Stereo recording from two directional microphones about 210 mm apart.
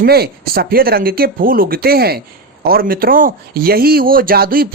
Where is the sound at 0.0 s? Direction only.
50° right (ahead or behind).